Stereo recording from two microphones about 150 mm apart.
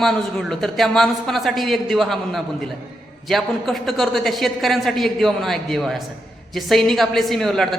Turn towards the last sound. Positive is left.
turn(degrees=0)  # may be behind; listen again after turning